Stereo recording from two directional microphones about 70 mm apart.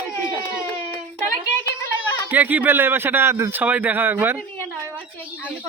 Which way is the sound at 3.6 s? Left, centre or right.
Right.